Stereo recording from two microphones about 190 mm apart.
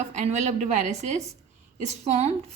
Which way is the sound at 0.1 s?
35° right (ahead or behind).